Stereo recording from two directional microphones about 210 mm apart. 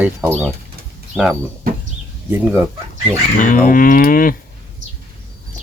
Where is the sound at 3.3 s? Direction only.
40° left (ahead or behind).